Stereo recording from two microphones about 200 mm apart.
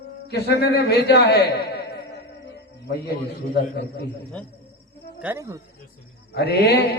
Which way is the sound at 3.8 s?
60° left (ahead or behind).